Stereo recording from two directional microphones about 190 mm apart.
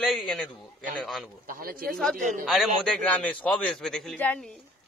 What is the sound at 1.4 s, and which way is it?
Speech, 50° right (ahead or behind).